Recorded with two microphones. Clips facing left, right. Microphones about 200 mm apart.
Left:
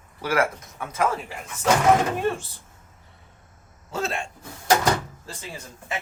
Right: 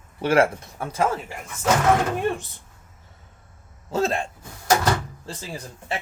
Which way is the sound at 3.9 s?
40° right (ahead or behind).